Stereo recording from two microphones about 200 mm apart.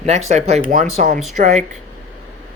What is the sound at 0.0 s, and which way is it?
Speech, 35° right (ahead or behind).